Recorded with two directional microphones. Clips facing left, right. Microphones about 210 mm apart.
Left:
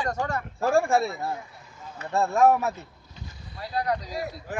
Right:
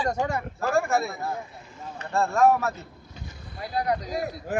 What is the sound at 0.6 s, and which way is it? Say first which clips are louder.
Speech: left 3 dB; 30° left (ahead or behind).